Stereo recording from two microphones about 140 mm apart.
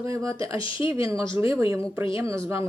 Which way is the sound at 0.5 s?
40° left (ahead or behind).